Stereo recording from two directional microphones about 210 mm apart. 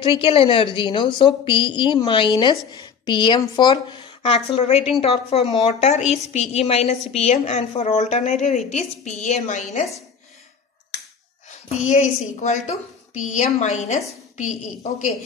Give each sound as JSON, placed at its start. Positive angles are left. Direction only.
{"t": 0.0, "sound": "a woman's voice", "side_deg": 25}
{"t": 11.8, "sound": "a woman's voice", "side_deg": 35}